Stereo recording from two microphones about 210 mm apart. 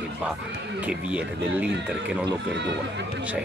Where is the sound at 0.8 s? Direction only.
5° right (ahead or behind).